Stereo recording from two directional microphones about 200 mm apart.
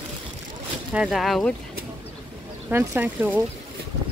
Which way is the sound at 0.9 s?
5° right (ahead or behind).